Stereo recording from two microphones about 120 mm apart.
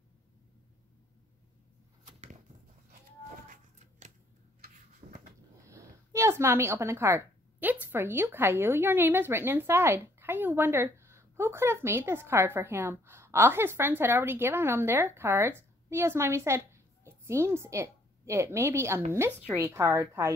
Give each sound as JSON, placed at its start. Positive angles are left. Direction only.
{"t": 2.0, "sound": "arrow", "side_deg": -90}
{"t": 5.0, "sound": "a sound", "side_deg": -70}
{"t": 5.7, "sound": "a woman's voice", "side_deg": -25}